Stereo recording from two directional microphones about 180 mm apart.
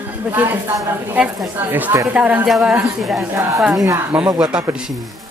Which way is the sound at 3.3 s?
15° right (ahead or behind).